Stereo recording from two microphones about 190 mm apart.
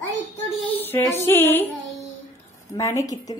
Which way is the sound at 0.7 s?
10° left (ahead or behind).